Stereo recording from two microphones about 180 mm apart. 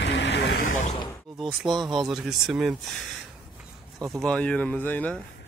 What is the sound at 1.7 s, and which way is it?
Speech, 25° right (ahead or behind).